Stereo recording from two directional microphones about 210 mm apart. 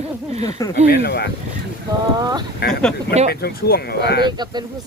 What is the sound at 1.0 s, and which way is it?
Speech, 50° left (ahead or behind).